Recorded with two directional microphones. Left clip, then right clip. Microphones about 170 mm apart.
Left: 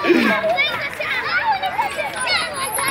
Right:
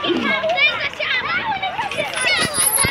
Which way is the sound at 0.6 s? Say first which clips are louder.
Right 3 dB; 30° left (ahead or behind).